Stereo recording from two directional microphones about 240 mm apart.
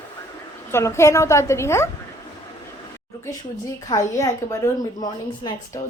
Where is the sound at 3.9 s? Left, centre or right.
Centre.